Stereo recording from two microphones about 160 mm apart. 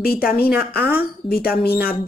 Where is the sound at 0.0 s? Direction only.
70° left (ahead or behind).